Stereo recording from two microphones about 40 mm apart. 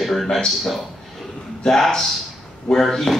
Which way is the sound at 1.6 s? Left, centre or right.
Centre.